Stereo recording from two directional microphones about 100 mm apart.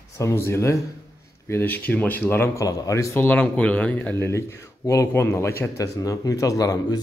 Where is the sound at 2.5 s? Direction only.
35° left (ahead or behind).